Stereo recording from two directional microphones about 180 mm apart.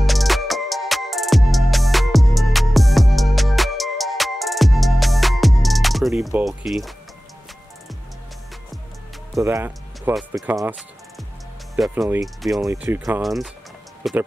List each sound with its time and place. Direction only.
0.0 s music: centre (ahead or behind)
9.4 s speech: 15° right (ahead or behind)
10.1 s speech: centre (ahead or behind)
10.5 s speech: 15° right (ahead or behind)
11.9 s speech: 10° right (ahead or behind)
12.4 s speech: centre (ahead or behind)